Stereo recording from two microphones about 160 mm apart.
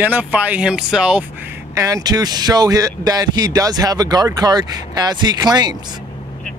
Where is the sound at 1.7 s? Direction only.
20° right (ahead or behind).